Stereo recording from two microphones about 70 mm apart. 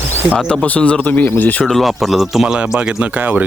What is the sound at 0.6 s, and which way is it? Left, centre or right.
Speech, centre.